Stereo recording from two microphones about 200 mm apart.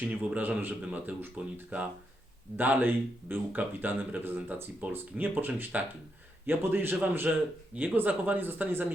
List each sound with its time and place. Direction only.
0.0 s speech: 5° right (ahead or behind)